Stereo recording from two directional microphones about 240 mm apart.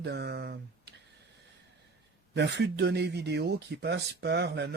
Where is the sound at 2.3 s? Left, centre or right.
Right.